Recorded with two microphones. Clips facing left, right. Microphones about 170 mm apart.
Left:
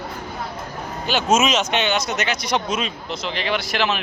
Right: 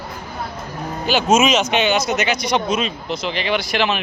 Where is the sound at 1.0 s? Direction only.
Centre (ahead or behind).